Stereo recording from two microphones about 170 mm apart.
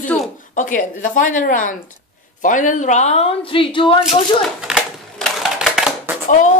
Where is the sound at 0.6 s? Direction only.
50° left (ahead or behind); by 4.0 s 30° left (ahead or behind).